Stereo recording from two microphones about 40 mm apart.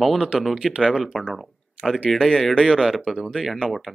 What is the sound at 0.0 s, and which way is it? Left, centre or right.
Speech, centre.